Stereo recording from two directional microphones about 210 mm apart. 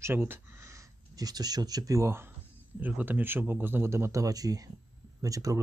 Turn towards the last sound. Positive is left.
turn(degrees=-15)  # may be behind; listen again after turning